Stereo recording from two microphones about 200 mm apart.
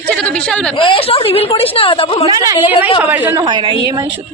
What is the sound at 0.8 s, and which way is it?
A woman's voice, 25° left (ahead or behind).